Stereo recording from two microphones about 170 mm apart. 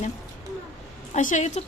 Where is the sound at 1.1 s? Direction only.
50° left (ahead or behind).